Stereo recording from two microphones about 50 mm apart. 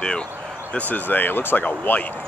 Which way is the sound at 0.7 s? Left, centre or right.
Left.